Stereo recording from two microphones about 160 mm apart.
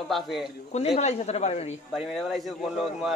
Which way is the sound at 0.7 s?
40° left (ahead or behind).